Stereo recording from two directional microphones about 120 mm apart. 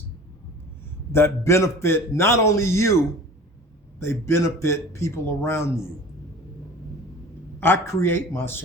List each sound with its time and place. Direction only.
1.1 s a man's voice: 20° left (ahead or behind)
4.0 s a man's voice: 20° left (ahead or behind)
7.6 s a man's voice: 20° left (ahead or behind)